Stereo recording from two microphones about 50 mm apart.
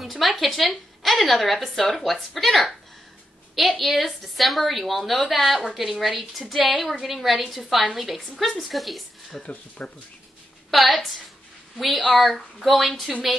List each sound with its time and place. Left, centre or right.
0.0 s a woman's voice: centre
3.5 s a woman's voice: centre
9.8 s speech: left
10.7 s a woman's voice: centre
12.2 s a woman's voice: centre